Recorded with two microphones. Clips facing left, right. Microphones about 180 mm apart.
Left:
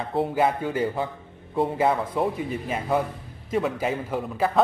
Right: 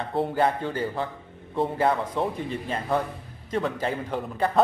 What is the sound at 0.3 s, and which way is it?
Speech, 5° left (ahead or behind).